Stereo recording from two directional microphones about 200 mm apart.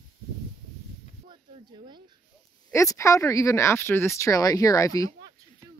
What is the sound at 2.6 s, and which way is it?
Speech, 15° left (ahead or behind).